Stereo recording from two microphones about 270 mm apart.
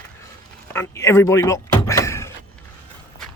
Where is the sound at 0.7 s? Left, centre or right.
Centre.